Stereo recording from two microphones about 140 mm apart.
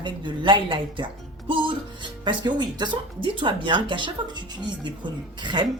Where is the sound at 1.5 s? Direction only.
35° right (ahead or behind).